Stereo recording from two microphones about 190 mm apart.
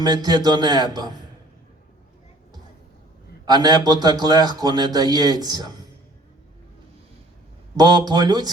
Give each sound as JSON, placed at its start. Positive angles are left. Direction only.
{"t": 0.0, "sound": "a man's voice", "side_deg": -20}
{"t": 3.4, "sound": "a man's voice", "side_deg": -20}
{"t": 7.8, "sound": "a man's voice", "side_deg": -20}